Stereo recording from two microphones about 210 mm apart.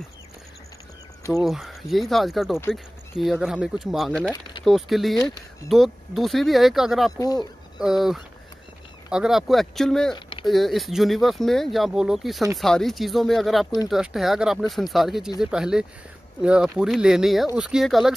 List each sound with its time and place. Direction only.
1.4 s speech: centre (ahead or behind)
7.1 s speech: 15° left (ahead or behind)
7.8 s speech: centre (ahead or behind)